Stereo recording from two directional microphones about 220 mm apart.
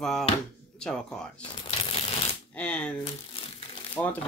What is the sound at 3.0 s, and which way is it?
Crumpling, 25° left (ahead or behind).